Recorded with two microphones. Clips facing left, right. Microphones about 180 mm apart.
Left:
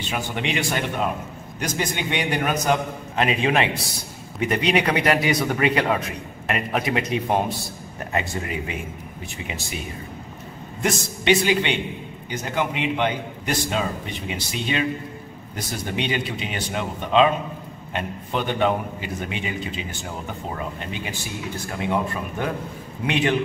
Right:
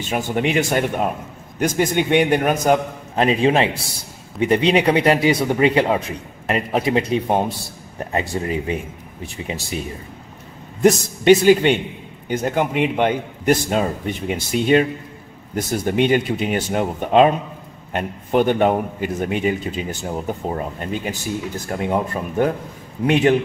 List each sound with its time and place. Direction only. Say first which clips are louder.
0.1 s a man's voice: right 7 dB; 45° right (ahead or behind)
3.2 s a man's voice: right 5 dB; 35° right (ahead or behind)
10.8 s a man's voice: right 10 dB; 45° right (ahead or behind)